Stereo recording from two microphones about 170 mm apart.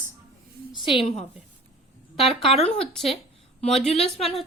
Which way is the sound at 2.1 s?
Centre (ahead or behind).